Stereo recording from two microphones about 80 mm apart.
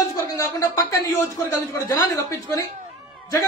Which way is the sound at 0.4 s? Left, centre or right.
Left.